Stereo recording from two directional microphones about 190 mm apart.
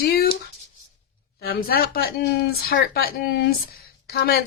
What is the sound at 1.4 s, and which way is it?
A woman's voice, 55° left (ahead or behind).